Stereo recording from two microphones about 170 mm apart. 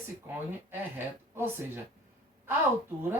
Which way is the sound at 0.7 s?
15° right (ahead or behind).